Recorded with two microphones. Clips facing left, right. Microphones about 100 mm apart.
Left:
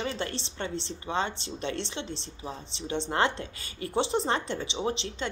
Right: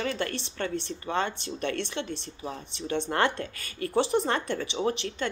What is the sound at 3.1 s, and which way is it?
Speech, 20° left (ahead or behind).